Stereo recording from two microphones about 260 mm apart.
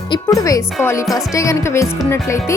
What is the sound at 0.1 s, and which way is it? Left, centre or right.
Speech, centre.